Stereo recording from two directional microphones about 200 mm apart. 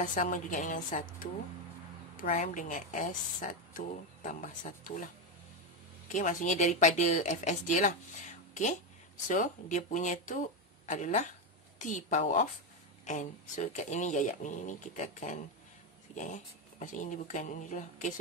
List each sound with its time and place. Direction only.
0.0 s a woman's voice: 40° left (ahead or behind)
16.8 s a woman's voice: 40° left (ahead or behind)